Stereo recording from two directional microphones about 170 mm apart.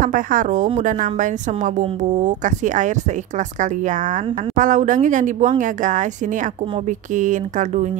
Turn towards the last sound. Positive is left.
turn(degrees=-45)  # may be behind; listen again after turning